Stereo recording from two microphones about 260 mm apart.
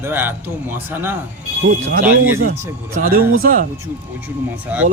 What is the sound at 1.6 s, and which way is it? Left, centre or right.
Speech, right.